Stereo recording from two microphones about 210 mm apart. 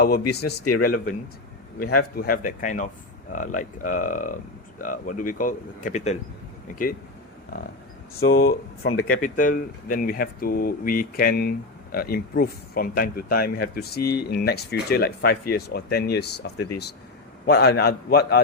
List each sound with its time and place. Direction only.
0.0 s speech: 50° left (ahead or behind)
8.3 s speech: 45° left (ahead or behind)